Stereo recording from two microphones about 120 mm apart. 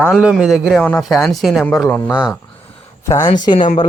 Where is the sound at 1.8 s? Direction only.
15° left (ahead or behind).